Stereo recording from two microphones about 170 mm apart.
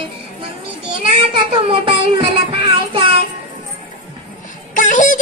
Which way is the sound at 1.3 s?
30° right (ahead or behind).